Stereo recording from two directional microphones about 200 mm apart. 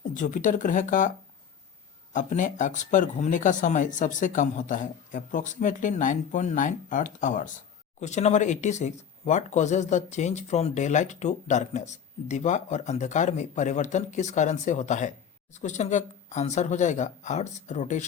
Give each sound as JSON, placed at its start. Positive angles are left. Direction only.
{"t": 0.1, "sound": "speech", "side_deg": 40}
{"t": 2.1, "sound": "speech", "side_deg": 40}